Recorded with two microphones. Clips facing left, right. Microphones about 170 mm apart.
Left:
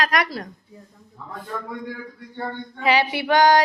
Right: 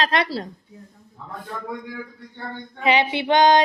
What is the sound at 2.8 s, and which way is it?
Female singing, 20° right (ahead or behind).